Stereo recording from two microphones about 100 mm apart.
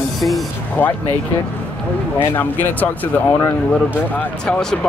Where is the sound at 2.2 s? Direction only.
20° left (ahead or behind).